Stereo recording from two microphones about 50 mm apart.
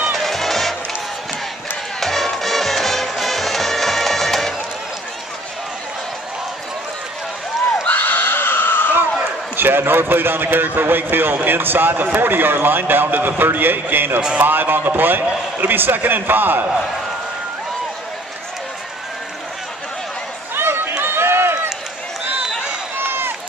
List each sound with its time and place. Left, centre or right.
0.1 s music: centre
2.0 s music: centre
7.8 s screaming: left
9.6 s a man's voice: right
20.5 s a sound: right
21.0 s run: right
22.9 s run: right